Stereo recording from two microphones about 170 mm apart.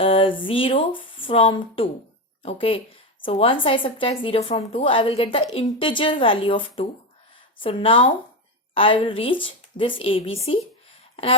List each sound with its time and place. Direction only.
0.0 s a woman's voice: 30° left (ahead or behind)